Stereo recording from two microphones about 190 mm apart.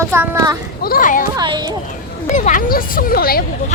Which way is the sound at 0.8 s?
50° left (ahead or behind).